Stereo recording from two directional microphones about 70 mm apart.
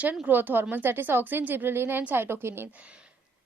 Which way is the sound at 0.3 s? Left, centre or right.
Right.